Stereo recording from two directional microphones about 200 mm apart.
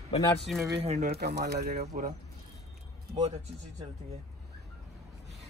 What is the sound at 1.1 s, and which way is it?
Speech, 55° right (ahead or behind).